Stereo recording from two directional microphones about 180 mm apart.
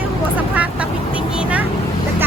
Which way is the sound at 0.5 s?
10° right (ahead or behind).